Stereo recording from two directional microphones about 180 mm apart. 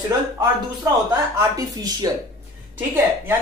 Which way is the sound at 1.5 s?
20° right (ahead or behind).